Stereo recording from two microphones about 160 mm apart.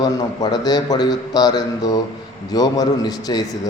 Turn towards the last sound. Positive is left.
turn(degrees=25)  # may be behind; listen again after turning